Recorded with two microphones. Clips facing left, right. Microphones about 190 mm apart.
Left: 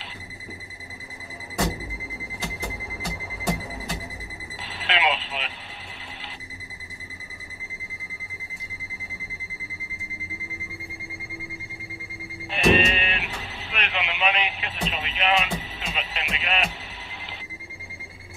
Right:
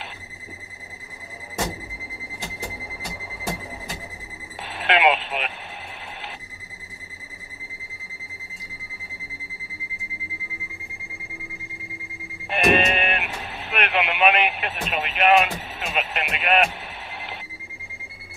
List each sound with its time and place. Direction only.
4.6 s radio: 55° right (ahead or behind)
12.4 s sheep: 55° right (ahead or behind)